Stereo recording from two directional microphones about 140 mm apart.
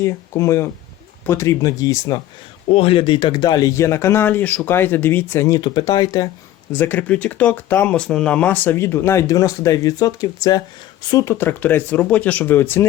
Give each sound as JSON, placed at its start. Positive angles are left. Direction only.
{"t": 0.0, "sound": "speech", "side_deg": 20}
{"t": 2.6, "sound": "speech", "side_deg": 40}
{"t": 6.7, "sound": "speech", "side_deg": 10}